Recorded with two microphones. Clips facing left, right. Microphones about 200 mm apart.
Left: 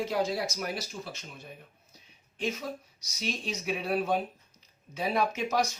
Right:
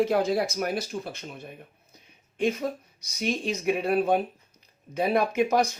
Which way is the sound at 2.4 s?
55° right (ahead or behind).